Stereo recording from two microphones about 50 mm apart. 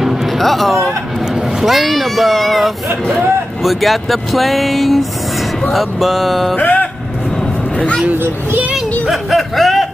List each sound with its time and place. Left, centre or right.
0.0 s music: centre
1.3 s speech: centre
6.5 s vehicle: left
8.1 s speech: right
9.0 s speech: centre